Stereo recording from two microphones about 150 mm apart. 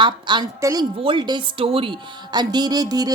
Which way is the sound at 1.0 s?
35° right (ahead or behind).